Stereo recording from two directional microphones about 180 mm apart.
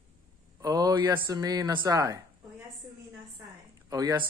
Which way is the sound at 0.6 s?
20° right (ahead or behind).